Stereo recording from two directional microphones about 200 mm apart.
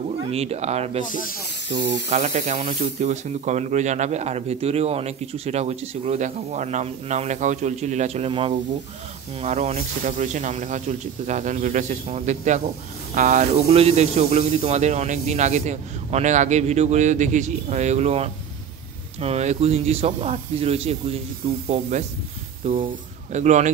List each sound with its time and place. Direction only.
0.3 s speech: 30° right (ahead or behind)
23.3 s speech: 35° right (ahead or behind)